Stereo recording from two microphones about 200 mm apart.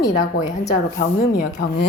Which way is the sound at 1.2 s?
45° left (ahead or behind).